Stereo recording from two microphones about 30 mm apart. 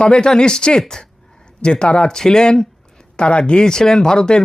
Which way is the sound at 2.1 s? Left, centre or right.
Centre.